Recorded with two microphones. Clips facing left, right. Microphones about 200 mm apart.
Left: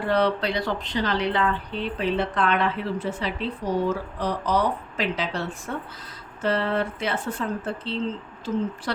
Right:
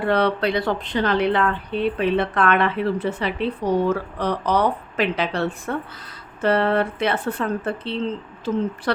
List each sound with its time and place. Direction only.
0.1 s a woman's voice: 60° right (ahead or behind)